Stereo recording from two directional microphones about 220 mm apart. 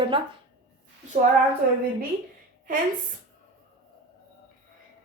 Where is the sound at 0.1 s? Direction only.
25° right (ahead or behind).